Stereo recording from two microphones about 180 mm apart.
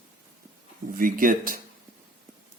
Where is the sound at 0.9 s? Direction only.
50° right (ahead or behind).